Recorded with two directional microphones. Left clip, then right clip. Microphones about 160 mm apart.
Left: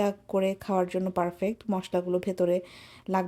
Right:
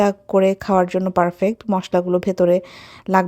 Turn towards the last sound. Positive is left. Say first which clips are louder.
# right 12 dB
turn(degrees=-40)  # may be behind; listen again after turning